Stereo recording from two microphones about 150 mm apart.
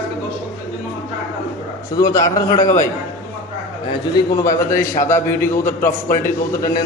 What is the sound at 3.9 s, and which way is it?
A man's voice, 25° left (ahead or behind).